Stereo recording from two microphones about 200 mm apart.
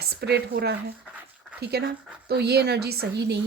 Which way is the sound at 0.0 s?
55° right (ahead or behind).